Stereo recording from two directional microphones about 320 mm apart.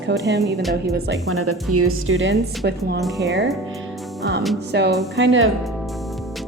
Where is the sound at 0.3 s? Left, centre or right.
Right.